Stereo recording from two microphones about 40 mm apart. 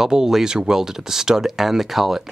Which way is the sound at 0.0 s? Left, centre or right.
Centre.